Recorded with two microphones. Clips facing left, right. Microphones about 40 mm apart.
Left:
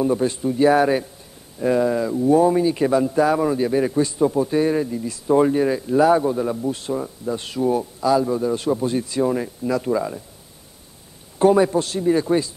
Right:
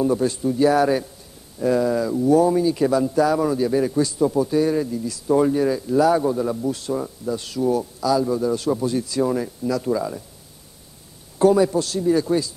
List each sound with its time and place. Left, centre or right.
0.0 s speech: left
9.2 s speech: centre
11.3 s a man's voice: left